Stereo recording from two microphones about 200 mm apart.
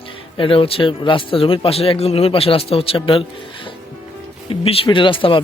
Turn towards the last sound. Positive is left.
turn(degrees=25)  # may be behind; listen again after turning